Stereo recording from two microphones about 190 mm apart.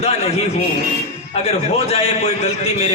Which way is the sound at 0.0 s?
30° left (ahead or behind).